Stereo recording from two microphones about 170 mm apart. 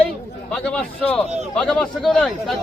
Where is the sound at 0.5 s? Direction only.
5° left (ahead or behind).